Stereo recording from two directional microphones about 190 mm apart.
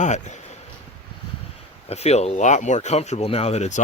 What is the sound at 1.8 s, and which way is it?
Speech, 35° left (ahead or behind).